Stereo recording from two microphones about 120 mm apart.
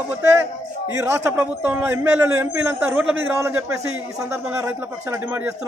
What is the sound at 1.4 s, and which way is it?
A man's voice, 20° right (ahead or behind).